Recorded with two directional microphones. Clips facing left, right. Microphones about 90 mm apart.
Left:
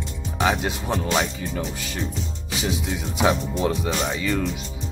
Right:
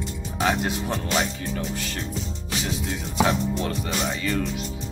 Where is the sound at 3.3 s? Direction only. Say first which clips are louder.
Left 3 dB; 10° left (ahead or behind).